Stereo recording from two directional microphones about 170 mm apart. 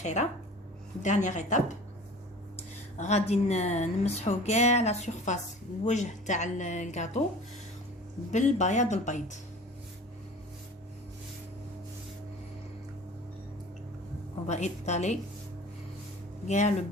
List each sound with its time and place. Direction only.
0.0 s a woman's voice: 45° left (ahead or behind)
3.0 s a woman's voice: 40° left (ahead or behind)
8.3 s a woman's voice: 45° left (ahead or behind)
14.4 s a woman's voice: 40° left (ahead or behind)
16.5 s a woman's voice: 45° left (ahead or behind)